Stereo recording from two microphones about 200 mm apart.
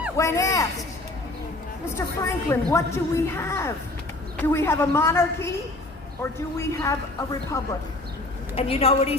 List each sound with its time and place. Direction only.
0.2 s a woman's voice: 15° left (ahead or behind)
2.0 s a woman's voice: 10° left (ahead or behind)
6.6 s a woman's voice: 15° left (ahead or behind)
8.5 s a woman's voice: 30° left (ahead or behind)